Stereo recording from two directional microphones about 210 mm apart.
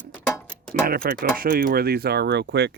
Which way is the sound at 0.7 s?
45° right (ahead or behind).